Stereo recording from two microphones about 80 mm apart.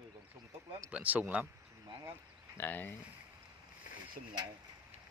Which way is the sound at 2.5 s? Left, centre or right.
Left.